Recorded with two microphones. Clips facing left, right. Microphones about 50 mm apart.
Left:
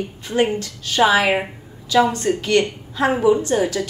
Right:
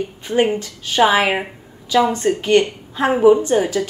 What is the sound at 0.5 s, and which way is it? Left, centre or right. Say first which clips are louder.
A woman's voice: right 2 dB; centre.